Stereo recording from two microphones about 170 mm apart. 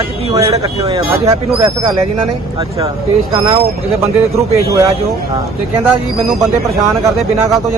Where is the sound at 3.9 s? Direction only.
35° right (ahead or behind).